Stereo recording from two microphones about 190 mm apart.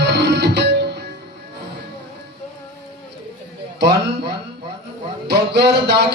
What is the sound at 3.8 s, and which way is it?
Music, 65° right (ahead or behind).